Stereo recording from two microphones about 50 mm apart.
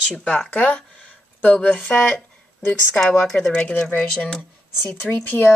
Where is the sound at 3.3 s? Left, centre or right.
Left.